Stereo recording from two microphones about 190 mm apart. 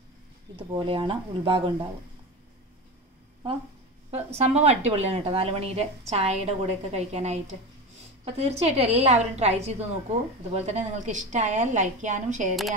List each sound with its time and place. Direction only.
0.6 s speech: 25° right (ahead or behind)
4.1 s speech: 35° right (ahead or behind)